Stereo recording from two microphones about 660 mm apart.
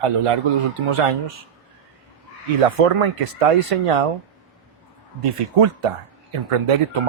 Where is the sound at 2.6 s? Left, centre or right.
Right.